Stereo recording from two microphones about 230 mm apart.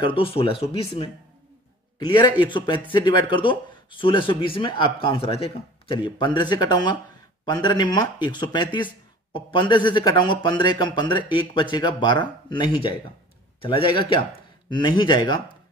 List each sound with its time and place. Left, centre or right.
0.0 s a man's voice: left